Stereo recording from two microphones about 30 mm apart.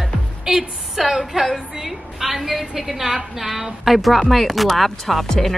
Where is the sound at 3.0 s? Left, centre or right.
Centre.